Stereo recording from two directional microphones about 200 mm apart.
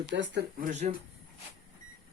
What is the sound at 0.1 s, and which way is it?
Speech, 60° right (ahead or behind).